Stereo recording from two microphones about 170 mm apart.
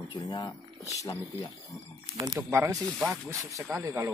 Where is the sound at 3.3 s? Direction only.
20° right (ahead or behind).